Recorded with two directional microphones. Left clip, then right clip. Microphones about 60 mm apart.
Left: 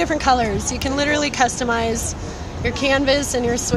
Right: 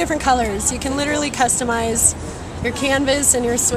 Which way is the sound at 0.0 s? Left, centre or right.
Left.